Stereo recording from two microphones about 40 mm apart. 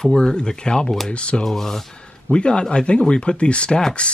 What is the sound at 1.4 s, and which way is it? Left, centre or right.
Speech, centre.